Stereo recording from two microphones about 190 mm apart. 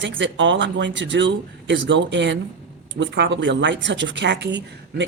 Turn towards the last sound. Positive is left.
turn(degrees=-65)  # may be behind; listen again after turning